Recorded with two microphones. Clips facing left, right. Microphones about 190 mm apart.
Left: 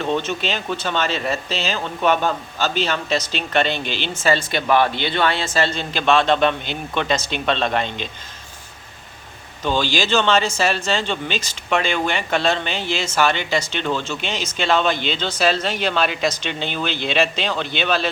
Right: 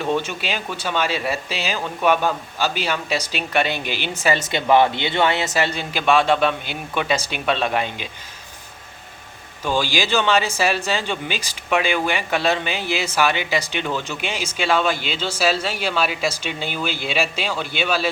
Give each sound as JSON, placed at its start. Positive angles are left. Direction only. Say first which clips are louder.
{"t": 0.0, "sound": "speech", "louder": "left 1 dB", "side_deg": -10}
{"t": 9.6, "sound": "speech", "louder": "left 1 dB", "side_deg": -10}